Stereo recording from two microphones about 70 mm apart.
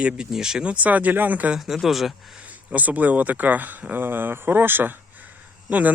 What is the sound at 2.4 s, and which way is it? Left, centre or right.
Speech, right.